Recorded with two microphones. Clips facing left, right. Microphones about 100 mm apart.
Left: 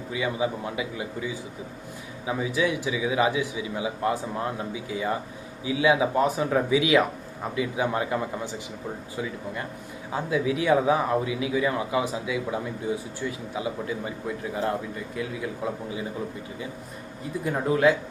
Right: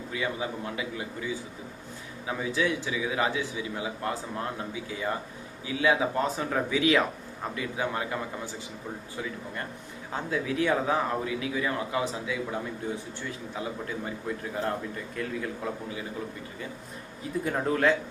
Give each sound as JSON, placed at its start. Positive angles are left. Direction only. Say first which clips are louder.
{"t": 0.1, "sound": "a man's voice", "louder": "left 5 dB", "side_deg": 15}
{"t": 2.2, "sound": "a man's voice", "louder": "left 3 dB", "side_deg": 15}
{"t": 10.1, "sound": "a man's voice", "louder": "left 5 dB", "side_deg": 10}
{"t": 15.1, "sound": "a man's voice", "louder": "left 1 dB", "side_deg": 10}
{"t": 17.4, "sound": "a man's voice", "louder": "left 4 dB", "side_deg": 5}